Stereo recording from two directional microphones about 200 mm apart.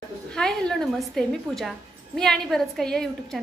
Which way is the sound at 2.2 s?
Centre (ahead or behind).